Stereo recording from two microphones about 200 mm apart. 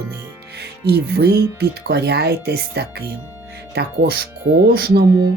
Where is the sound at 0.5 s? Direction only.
55° right (ahead or behind).